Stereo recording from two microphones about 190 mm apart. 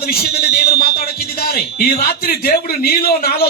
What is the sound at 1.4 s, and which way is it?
A man's voice, 50° left (ahead or behind).